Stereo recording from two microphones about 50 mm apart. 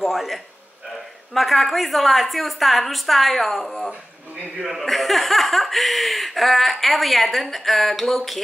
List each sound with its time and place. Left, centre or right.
0.0 s speech: centre